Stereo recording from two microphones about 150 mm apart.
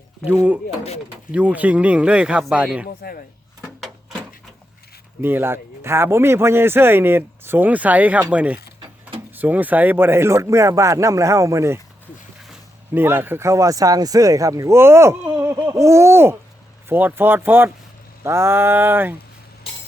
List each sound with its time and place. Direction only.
1.3 s speech: 10° right (ahead or behind)
2.8 s speech: 75° left (ahead or behind)
3.6 s a sound: centre (ahead or behind)
5.2 s speech: 15° right (ahead or behind)
12.9 s speech: 15° right (ahead or behind)